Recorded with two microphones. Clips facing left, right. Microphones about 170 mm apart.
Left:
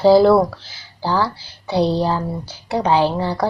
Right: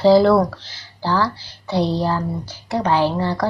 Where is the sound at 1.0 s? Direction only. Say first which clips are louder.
Even; 15° left (ahead or behind).